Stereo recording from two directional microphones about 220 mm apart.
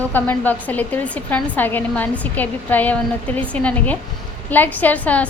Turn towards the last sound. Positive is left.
turn(degrees=5)  # may be behind; listen again after turning